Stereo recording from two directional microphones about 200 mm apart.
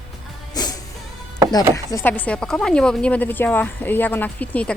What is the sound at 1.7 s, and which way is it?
Speech, 15° left (ahead or behind).